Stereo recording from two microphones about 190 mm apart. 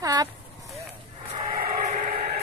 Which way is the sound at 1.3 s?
25° right (ahead or behind).